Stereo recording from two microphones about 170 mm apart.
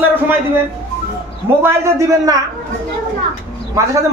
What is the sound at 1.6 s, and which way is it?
Speech, 15° right (ahead or behind).